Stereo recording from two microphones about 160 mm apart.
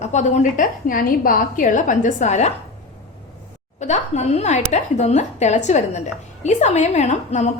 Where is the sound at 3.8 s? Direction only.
45° left (ahead or behind).